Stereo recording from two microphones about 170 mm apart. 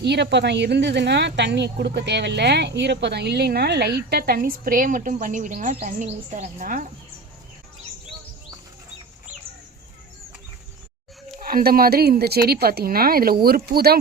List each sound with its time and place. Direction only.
0.0 s speech: 85° right; by 6.8 s 50° right (ahead or behind)
11.3 s speech: 60° right (ahead or behind)